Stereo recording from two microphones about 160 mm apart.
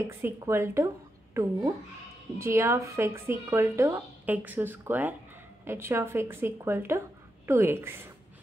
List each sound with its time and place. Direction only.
0.1 s a woman's voice: 15° right (ahead or behind)